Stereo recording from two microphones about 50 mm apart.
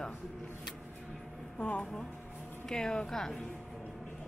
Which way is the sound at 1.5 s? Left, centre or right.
Left.